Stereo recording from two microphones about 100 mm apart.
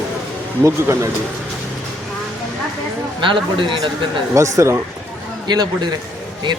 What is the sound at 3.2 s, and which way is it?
Speech, 55° right (ahead or behind).